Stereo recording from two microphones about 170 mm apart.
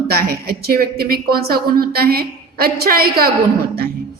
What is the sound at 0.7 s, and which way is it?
A woman's voice, 65° right (ahead or behind).